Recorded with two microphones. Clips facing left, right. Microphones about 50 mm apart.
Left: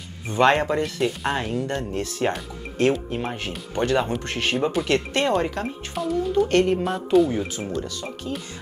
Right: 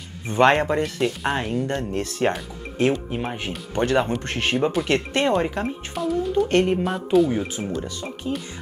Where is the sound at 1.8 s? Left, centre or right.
Right.